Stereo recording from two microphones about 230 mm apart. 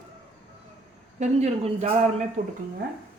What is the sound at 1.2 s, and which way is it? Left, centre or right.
Speech, right.